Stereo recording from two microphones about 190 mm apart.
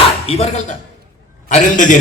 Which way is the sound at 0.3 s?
35° left (ahead or behind).